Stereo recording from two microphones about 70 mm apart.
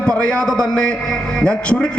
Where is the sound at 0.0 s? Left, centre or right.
Centre.